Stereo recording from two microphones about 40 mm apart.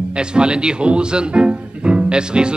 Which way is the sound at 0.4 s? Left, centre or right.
Right.